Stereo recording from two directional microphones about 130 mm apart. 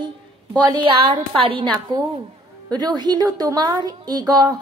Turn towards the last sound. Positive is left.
turn(degrees=-30)  # may be behind; listen again after turning